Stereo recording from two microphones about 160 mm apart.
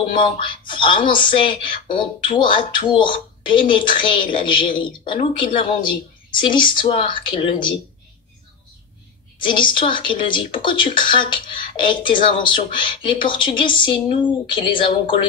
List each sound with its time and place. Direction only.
0.1 s speech: 30° left (ahead or behind)
9.5 s speech: 30° left (ahead or behind)